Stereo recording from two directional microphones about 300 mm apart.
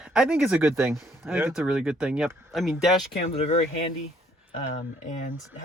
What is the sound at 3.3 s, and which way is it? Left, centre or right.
Speech, left.